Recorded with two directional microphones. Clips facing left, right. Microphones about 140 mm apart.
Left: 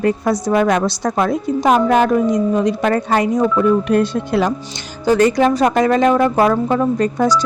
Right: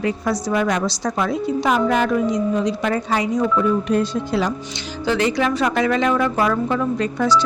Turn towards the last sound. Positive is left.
turn(degrees=45)  # may be behind; listen again after turning